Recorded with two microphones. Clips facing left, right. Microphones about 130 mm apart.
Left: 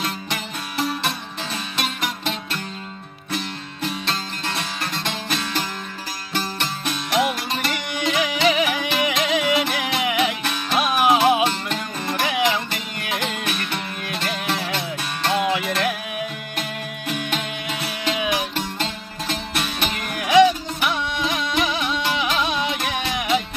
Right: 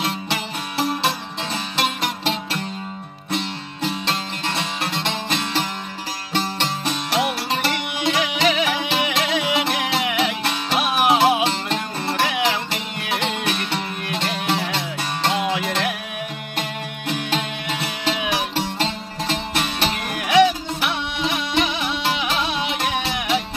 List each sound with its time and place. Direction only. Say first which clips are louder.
1.5 s music: right 4 dB; 30° right (ahead or behind)
3.3 s music: right 2 dB; 25° right (ahead or behind)
17.1 s music: right 2 dB; 25° right (ahead or behind)
19.5 s music: right 3 dB; 30° right (ahead or behind)
21.2 s music: right 3 dB; 25° right (ahead or behind)